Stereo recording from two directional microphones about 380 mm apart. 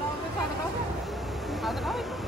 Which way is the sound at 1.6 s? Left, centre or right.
Centre.